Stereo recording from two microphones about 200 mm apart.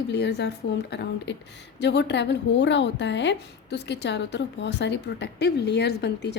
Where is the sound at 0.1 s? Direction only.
55° left (ahead or behind).